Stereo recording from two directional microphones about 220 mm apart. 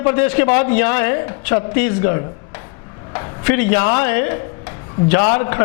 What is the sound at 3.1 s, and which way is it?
A woman's voice, 15° left (ahead or behind).